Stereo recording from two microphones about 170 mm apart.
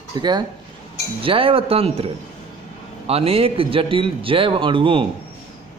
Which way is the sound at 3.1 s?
35° right (ahead or behind).